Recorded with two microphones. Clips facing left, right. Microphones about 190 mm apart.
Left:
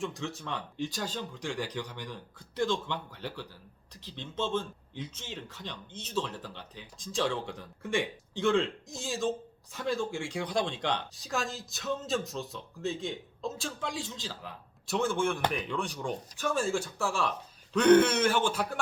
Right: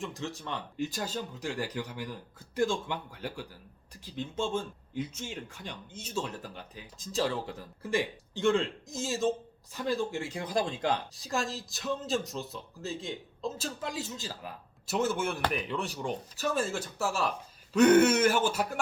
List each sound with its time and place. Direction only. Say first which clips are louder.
0.0 s speech: left 1 dB; centre (ahead or behind)
16.4 s speech: left 2 dB; 40° right (ahead or behind)
17.7 s speech: right 1 dB; 10° right (ahead or behind)